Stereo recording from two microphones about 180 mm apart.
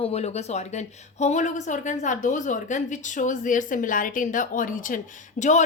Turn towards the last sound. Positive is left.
turn(degrees=40)  # may be behind; listen again after turning